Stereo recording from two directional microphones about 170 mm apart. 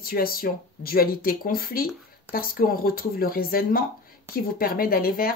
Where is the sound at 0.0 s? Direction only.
60° left (ahead or behind).